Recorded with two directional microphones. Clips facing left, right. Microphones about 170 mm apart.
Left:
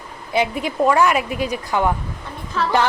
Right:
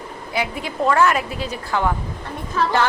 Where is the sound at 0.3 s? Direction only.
20° left (ahead or behind).